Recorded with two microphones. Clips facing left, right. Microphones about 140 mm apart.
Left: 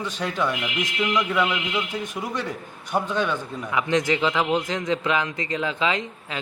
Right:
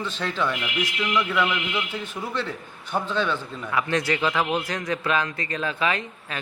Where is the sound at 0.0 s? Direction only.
10° left (ahead or behind).